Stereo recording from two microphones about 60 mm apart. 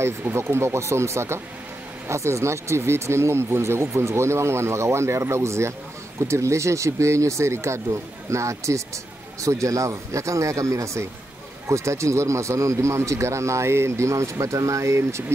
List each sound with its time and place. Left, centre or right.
0.4 s speech: right